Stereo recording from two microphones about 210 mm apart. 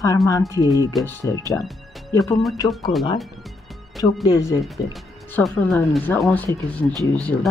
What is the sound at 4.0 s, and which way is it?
Speech, 15° left (ahead or behind).